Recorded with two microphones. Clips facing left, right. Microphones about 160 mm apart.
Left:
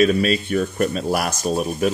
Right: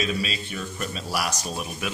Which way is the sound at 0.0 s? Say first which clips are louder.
Left 11 dB; 55° left (ahead or behind).